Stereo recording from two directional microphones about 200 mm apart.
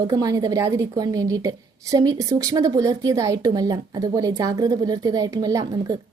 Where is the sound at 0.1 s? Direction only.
20° right (ahead or behind).